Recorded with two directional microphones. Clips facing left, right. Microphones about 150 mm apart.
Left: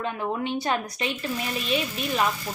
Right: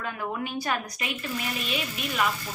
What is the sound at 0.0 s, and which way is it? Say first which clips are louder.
A woman's voice: left 4 dB; 25° left (ahead or behind).